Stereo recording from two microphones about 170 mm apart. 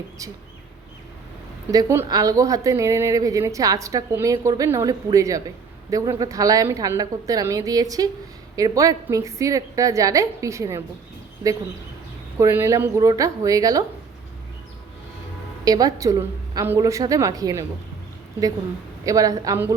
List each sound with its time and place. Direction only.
1.7 s a woman's voice: 20° right (ahead or behind)
12.4 s a woman's voice: 15° right (ahead or behind)
15.6 s a woman's voice: 20° right (ahead or behind)
19.0 s a woman's voice: 20° right (ahead or behind)